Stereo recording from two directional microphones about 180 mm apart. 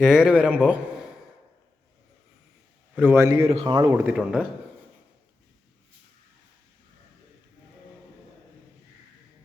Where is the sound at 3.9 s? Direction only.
5° right (ahead or behind).